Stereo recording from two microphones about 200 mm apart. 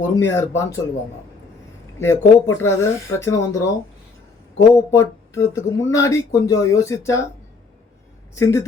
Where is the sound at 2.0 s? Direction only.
15° left (ahead or behind).